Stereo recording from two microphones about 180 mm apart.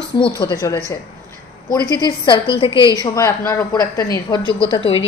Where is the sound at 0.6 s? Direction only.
15° left (ahead or behind).